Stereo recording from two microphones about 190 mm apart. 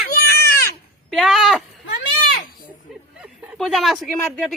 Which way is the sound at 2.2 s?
50° left (ahead or behind).